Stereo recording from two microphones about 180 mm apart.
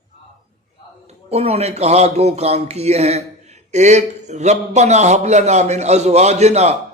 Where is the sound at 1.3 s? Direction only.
35° right (ahead or behind).